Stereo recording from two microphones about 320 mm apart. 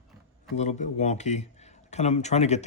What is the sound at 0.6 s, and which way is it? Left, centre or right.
A man's voice, left.